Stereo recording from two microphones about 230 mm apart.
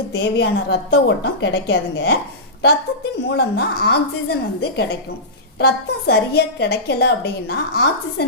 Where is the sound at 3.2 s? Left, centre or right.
Left.